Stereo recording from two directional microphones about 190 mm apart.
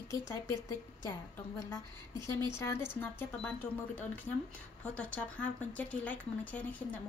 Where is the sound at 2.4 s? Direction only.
15° left (ahead or behind).